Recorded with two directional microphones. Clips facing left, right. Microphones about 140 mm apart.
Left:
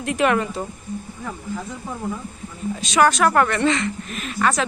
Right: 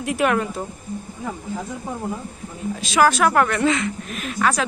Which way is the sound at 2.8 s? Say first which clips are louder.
Even; centre (ahead or behind).